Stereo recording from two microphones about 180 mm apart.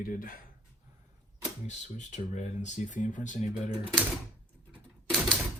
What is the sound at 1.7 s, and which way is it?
Speech, 40° left (ahead or behind).